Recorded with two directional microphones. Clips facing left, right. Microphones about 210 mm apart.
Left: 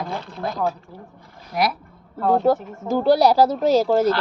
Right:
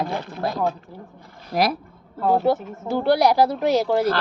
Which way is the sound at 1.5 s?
40° right (ahead or behind).